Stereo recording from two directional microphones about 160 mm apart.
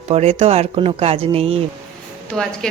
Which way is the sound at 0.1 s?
40° right (ahead or behind).